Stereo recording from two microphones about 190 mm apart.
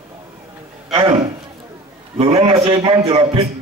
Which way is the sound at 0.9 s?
30° right (ahead or behind).